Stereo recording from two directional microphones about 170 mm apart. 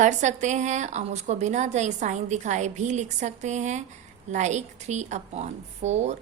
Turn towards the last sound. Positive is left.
turn(degrees=-40)  # may be behind; listen again after turning